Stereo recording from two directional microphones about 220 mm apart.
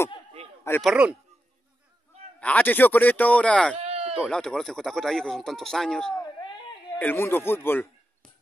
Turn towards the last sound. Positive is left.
turn(degrees=10)  # may be behind; listen again after turning